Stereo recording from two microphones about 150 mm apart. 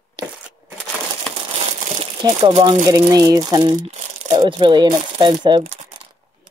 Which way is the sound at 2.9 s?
25° right (ahead or behind).